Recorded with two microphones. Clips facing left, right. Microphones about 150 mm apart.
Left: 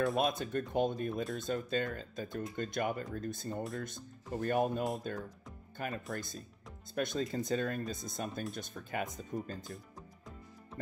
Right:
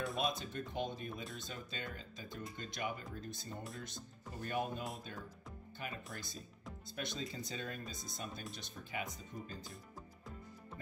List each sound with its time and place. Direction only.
0.2 s speech: 55° left (ahead or behind)
9.7 s music: centre (ahead or behind)